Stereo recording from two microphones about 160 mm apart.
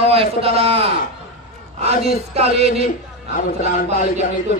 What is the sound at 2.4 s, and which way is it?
A man's voice, 40° right (ahead or behind).